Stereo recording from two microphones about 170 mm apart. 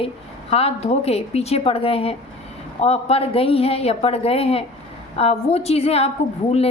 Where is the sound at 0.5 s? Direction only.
35° left (ahead or behind).